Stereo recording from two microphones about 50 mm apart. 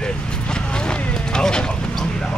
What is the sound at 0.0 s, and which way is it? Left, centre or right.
Vehicle, centre.